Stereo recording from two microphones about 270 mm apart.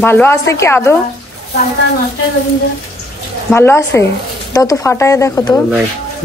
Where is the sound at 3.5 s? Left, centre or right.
Centre.